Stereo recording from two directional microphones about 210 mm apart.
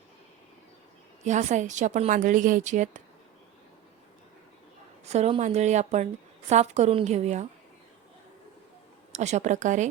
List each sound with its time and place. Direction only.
1.2 s a woman's voice: 35° right (ahead or behind)
5.0 s a woman's voice: 30° right (ahead or behind)
9.1 s a woman's voice: 35° right (ahead or behind)